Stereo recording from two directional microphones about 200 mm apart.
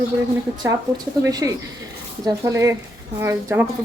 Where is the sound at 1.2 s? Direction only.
15° right (ahead or behind).